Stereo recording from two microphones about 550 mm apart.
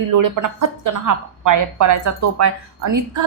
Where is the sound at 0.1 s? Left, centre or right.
Right.